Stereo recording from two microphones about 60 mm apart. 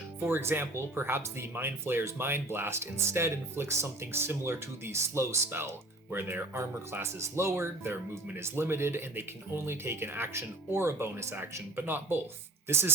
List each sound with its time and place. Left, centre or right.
0.2 s speech: right
5.5 s speech: right
11.9 s speech: right